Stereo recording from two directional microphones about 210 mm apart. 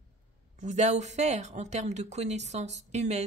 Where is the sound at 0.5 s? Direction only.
35° right (ahead or behind).